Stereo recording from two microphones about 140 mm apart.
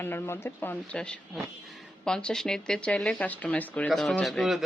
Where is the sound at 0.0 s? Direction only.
15° left (ahead or behind).